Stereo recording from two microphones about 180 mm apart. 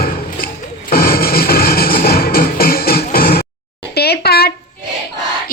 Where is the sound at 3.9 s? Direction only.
60° left (ahead or behind).